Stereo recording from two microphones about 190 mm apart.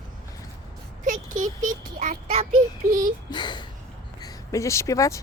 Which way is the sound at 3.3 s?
25° left (ahead or behind).